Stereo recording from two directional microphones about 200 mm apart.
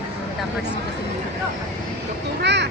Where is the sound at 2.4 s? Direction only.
60° right (ahead or behind).